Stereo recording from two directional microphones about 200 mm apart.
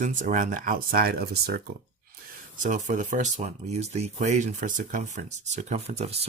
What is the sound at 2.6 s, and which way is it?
Speech, 35° right (ahead or behind).